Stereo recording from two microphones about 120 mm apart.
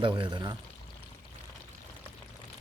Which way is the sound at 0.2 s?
40° right (ahead or behind).